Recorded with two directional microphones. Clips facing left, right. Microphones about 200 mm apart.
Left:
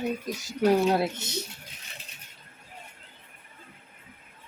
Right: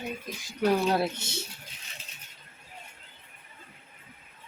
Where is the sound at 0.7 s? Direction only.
25° left (ahead or behind).